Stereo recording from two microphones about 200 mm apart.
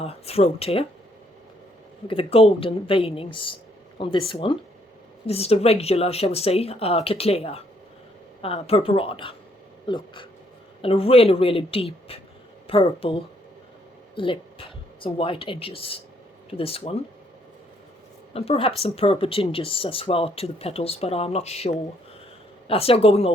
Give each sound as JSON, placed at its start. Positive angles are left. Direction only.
{"t": 0.0, "sound": "speech", "side_deg": 30}
{"t": 2.0, "sound": "speech", "side_deg": 30}
{"t": 18.3, "sound": "speech", "side_deg": 30}